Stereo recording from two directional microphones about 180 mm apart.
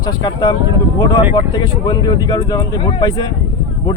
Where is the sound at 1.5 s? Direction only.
25° left (ahead or behind).